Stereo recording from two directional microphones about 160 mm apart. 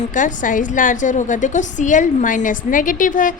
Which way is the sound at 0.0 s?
55° left (ahead or behind).